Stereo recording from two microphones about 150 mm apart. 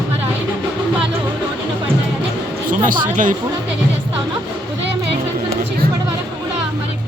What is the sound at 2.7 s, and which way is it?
Speech, 60° right (ahead or behind).